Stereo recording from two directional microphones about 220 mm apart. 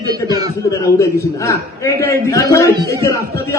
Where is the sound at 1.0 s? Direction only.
15° left (ahead or behind).